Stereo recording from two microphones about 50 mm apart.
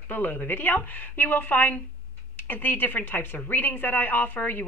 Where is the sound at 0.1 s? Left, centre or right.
Left.